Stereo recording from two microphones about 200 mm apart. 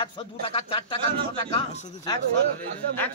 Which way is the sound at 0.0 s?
25° left (ahead or behind).